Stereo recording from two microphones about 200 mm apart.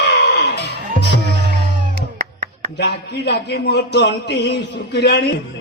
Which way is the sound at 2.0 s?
55° right (ahead or behind).